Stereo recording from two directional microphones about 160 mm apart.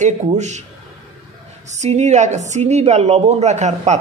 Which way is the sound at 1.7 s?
45° right (ahead or behind).